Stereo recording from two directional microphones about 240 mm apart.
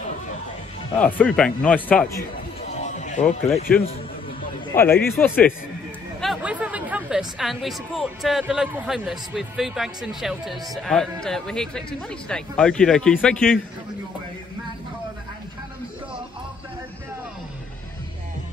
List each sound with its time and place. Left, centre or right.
0.9 s speech: centre
2.7 s music: left
3.7 s speech: centre
6.2 s speech: centre